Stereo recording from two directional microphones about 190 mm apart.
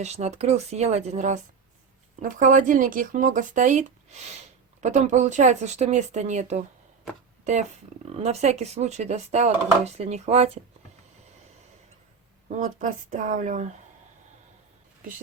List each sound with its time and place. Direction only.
0.0 s speech: 35° right (ahead or behind)
8.2 s speech: 35° right (ahead or behind)
12.5 s speech: 40° right (ahead or behind)